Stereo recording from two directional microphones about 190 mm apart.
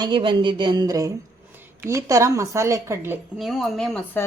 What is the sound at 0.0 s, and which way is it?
A woman's voice, 25° right (ahead or behind).